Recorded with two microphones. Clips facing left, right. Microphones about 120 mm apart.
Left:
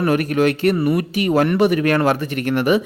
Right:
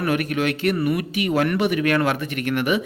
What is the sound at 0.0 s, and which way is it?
Speech, 40° left (ahead or behind).